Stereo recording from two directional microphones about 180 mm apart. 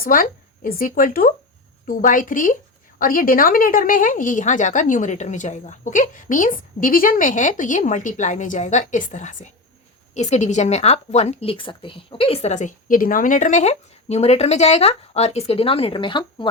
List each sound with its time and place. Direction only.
0.0 s speech: 50° left (ahead or behind); by 16.5 s 25° left (ahead or behind)